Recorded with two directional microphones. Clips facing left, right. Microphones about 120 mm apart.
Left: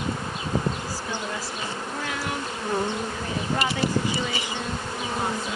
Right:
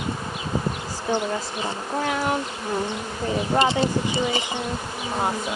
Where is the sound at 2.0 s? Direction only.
30° right (ahead or behind).